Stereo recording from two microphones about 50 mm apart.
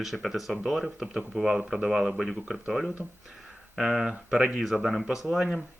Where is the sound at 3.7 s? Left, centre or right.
Centre.